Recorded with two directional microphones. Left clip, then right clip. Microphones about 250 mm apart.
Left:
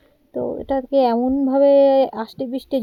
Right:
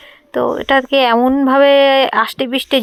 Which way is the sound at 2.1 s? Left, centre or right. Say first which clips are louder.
Right 12 dB; right.